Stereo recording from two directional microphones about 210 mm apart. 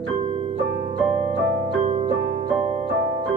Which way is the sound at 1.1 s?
30° right (ahead or behind).